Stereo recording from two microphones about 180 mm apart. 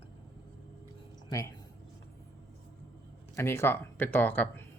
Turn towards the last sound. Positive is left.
turn(degrees=10)  # may be behind; listen again after turning